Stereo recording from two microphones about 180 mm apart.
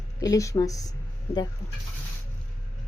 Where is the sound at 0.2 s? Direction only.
20° left (ahead or behind).